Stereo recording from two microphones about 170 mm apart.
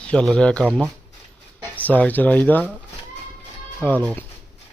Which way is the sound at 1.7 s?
10° left (ahead or behind).